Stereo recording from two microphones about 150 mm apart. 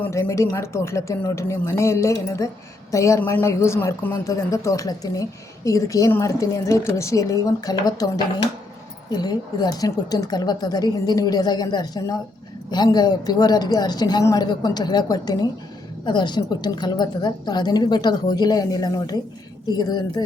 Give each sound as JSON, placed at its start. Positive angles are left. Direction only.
{"t": 0.0, "sound": "a woman's voice", "side_deg": 20}